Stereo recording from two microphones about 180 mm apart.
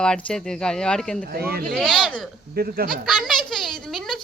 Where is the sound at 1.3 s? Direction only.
60° right (ahead or behind).